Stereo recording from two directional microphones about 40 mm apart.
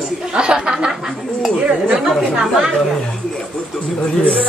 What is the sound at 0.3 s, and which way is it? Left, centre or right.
Speech, right.